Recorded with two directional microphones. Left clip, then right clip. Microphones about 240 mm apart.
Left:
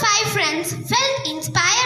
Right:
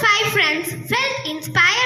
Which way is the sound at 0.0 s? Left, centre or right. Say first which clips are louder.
Right 2 dB; left.